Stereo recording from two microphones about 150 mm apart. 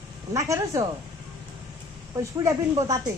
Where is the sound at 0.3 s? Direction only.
20° right (ahead or behind).